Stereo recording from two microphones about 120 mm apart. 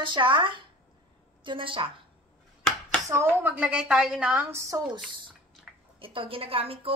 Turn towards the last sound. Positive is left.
turn(degrees=-50)  # may be behind; listen again after turning